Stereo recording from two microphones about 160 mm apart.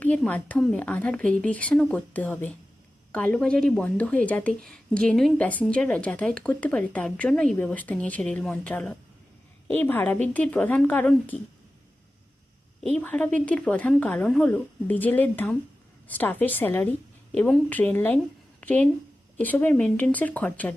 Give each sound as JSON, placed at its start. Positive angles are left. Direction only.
{"t": 0.3, "sound": "speech", "side_deg": 10}
{"t": 12.9, "sound": "a woman's voice", "side_deg": 10}